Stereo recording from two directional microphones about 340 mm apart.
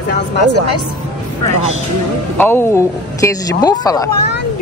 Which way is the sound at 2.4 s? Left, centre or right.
Centre.